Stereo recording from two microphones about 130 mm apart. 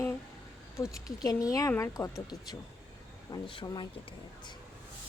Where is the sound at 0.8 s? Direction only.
25° left (ahead or behind).